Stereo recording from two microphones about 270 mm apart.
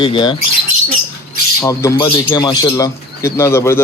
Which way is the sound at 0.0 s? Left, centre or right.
Centre.